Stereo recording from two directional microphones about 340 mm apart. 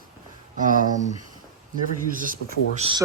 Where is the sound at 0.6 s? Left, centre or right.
Right.